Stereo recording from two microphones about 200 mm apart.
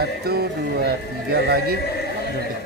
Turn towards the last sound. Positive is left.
turn(degrees=-50)  # may be behind; listen again after turning